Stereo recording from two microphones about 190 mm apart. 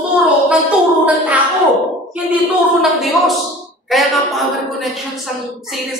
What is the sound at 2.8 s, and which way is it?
A woman's voice, centre (ahead or behind).